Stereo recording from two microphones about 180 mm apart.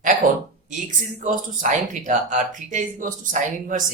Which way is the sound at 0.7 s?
45° right (ahead or behind).